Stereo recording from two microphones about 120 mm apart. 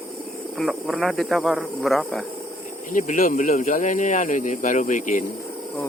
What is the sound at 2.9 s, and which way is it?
Speech, 90° left.